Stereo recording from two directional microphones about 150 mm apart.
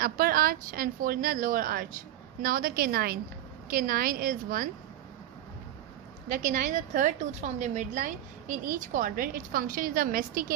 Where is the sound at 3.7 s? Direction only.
75° right (ahead or behind).